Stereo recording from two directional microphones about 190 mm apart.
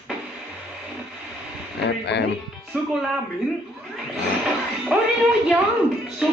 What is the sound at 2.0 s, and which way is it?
Speech, 65° left (ahead or behind).